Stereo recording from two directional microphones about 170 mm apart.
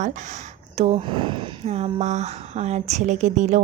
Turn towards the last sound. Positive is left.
turn(degrees=-45)  # may be behind; listen again after turning